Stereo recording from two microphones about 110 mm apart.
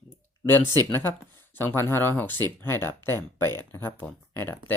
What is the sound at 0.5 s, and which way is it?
Speech, 35° right (ahead or behind).